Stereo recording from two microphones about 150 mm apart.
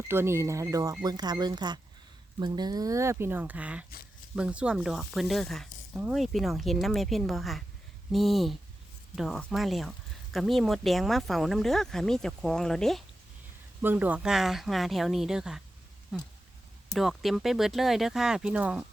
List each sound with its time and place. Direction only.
0.1 s speech: 15° right (ahead or behind); by 5.6 s centre (ahead or behind)
5.9 s speech: 10° right (ahead or behind)
13.8 s speech: 10° right (ahead or behind)